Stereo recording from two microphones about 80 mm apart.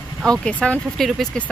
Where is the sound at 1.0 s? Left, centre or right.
Centre.